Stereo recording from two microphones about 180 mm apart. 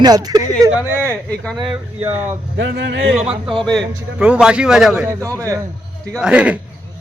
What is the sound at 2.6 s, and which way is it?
Speech, 75° right (ahead or behind).